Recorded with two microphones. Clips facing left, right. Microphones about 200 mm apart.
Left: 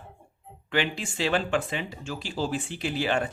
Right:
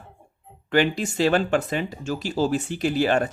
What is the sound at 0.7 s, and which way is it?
Speech, 40° right (ahead or behind).